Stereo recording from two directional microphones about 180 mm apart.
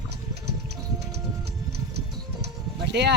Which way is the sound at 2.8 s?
70° right (ahead or behind).